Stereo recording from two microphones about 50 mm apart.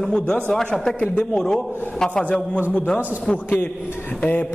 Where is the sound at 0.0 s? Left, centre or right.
Centre.